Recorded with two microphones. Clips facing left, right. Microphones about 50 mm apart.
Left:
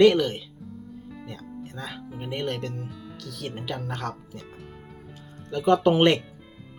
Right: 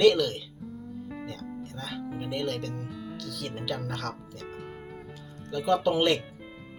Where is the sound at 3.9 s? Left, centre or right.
Left.